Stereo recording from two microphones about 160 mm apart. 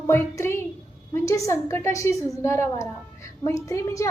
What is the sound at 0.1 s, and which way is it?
A child's voice, 15° left (ahead or behind).